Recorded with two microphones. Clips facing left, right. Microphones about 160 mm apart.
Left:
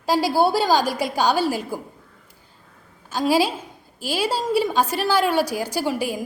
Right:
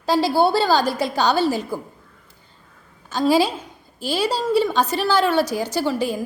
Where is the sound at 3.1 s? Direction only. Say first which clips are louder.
Right 2 dB; 10° left (ahead or behind).